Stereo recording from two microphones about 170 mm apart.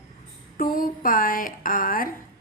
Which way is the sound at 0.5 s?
55° left (ahead or behind).